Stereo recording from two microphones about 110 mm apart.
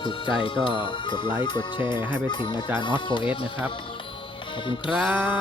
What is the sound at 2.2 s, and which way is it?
Music, 45° left (ahead or behind).